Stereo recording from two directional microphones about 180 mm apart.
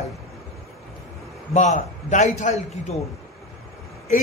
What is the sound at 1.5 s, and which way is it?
A man's voice, 40° left (ahead or behind).